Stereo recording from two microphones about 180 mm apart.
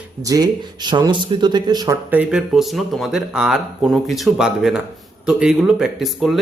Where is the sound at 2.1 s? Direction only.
5° right (ahead or behind).